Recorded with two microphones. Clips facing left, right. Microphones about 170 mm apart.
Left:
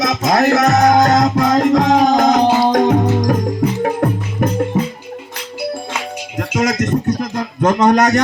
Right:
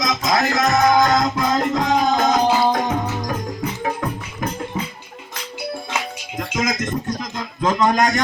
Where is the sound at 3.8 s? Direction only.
55° left (ahead or behind).